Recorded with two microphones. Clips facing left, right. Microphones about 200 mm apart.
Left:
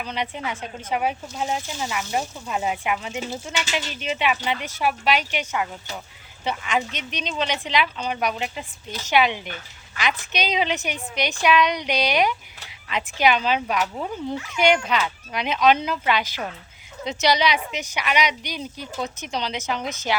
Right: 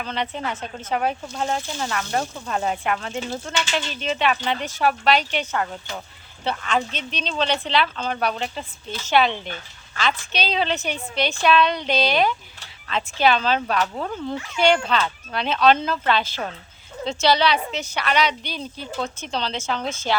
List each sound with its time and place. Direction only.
0.0 s speech: 10° left (ahead or behind)
19.8 s a woman's voice: 30° right (ahead or behind)